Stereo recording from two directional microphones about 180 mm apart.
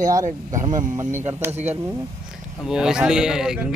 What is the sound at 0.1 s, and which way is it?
Speech, 20° right (ahead or behind).